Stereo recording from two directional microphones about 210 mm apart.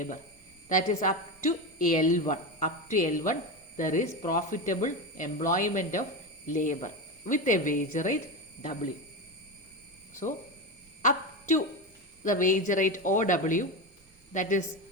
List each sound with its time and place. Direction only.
0.7 s speech: 35° left (ahead or behind)
11.0 s a sound: 35° left (ahead or behind)
12.2 s speech: 40° left (ahead or behind)